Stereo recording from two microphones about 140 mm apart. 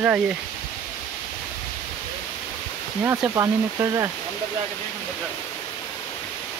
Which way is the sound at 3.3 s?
20° right (ahead or behind).